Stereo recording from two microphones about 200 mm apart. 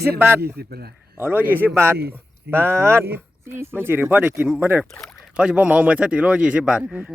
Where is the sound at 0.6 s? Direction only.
50° right (ahead or behind).